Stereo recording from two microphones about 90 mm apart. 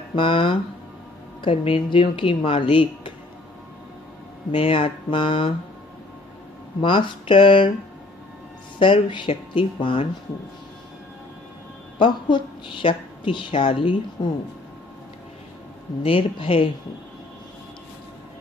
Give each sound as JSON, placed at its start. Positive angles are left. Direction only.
{"t": 0.1, "sound": "a woman's voice", "side_deg": 70}
{"t": 1.4, "sound": "speech", "side_deg": 90}
{"t": 4.5, "sound": "a woman's voice", "side_deg": 85}
{"t": 6.8, "sound": "a woman's voice", "side_deg": 70}
{"t": 8.7, "sound": "a woman's voice", "side_deg": 70}
{"t": 12.0, "sound": "a woman's voice", "side_deg": 70}
{"t": 14.2, "sound": "speech", "side_deg": 55}
{"t": 16.0, "sound": "speech", "side_deg": 85}